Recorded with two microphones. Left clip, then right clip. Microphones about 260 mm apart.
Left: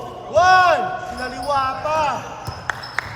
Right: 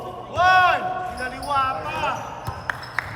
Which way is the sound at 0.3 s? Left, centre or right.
Centre.